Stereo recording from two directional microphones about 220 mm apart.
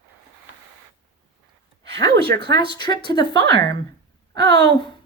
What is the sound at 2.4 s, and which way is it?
A woman's voice, 20° left (ahead or behind).